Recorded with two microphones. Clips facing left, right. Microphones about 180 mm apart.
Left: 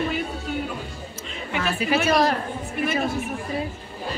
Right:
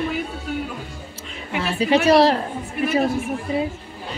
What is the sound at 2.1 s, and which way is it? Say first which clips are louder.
Speech: right 6 dB; 30° right (ahead or behind).